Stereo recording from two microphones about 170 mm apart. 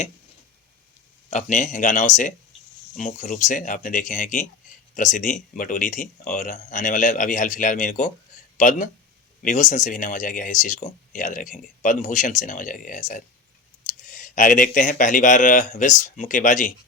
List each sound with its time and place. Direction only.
1.3 s speech: 45° left (ahead or behind)